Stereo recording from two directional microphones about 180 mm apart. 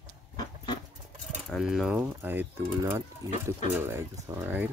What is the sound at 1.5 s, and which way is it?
Speech, centre (ahead or behind).